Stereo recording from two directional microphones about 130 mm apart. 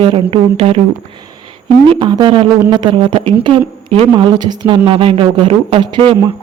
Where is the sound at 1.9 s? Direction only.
40° right (ahead or behind).